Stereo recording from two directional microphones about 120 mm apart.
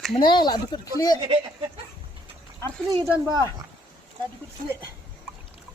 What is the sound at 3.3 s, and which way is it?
Speech, 30° right (ahead or behind).